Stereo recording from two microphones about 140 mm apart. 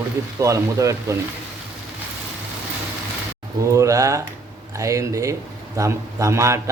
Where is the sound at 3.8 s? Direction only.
20° right (ahead or behind).